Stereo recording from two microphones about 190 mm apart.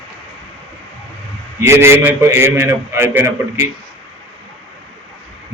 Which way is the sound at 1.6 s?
15° right (ahead or behind).